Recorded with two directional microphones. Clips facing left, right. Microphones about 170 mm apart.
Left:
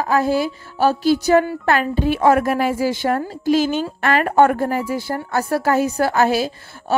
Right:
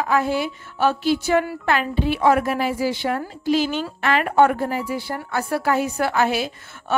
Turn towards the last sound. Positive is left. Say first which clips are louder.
# left 3 dB
turn(degrees=40)  # may be behind; listen again after turning